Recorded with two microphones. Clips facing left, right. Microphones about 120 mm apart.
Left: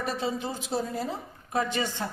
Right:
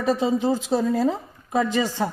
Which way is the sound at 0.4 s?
90° right.